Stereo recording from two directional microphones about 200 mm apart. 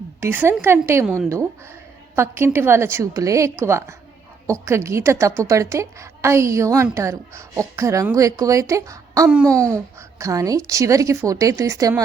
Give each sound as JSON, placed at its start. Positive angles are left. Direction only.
{"t": 0.2, "sound": "a child's voice", "side_deg": -10}